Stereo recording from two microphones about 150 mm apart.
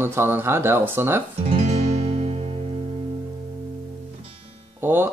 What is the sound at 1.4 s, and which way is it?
Music, 45° right (ahead or behind).